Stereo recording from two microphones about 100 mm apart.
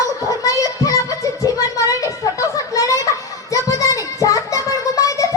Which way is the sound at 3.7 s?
35° left (ahead or behind).